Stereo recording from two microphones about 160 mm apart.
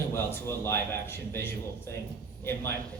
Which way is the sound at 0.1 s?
15° left (ahead or behind).